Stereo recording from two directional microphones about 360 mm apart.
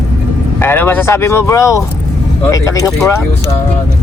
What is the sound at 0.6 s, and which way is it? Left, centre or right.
Speech, centre.